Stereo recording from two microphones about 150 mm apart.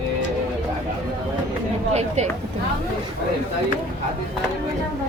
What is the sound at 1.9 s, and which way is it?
Speech, 45° right (ahead or behind).